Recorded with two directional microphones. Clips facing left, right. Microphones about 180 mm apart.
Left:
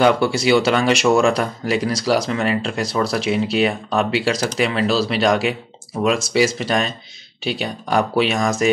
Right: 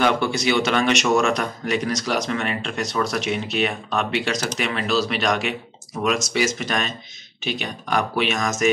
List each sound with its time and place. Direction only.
0.0 s speech: 30° left (ahead or behind)